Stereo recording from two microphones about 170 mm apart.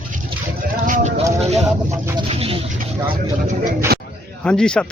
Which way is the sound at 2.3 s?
35° right (ahead or behind).